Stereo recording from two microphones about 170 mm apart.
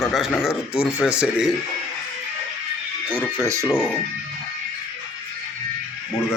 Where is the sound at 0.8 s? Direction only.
5° right (ahead or behind).